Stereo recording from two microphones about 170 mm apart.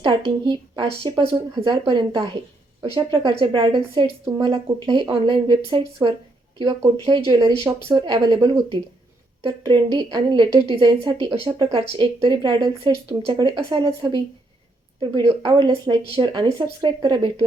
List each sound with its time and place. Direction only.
0.0 s a woman's voice: 30° right (ahead or behind)
2.9 s a woman's voice: 30° right (ahead or behind)
7.6 s a woman's voice: 15° right (ahead or behind)